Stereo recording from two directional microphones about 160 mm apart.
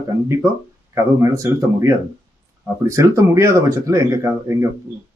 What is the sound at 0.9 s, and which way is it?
Speech, 20° right (ahead or behind).